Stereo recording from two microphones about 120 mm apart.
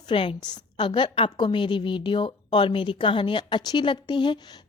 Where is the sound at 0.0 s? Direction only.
45° left (ahead or behind).